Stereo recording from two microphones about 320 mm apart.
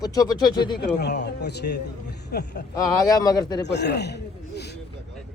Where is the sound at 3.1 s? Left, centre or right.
Centre.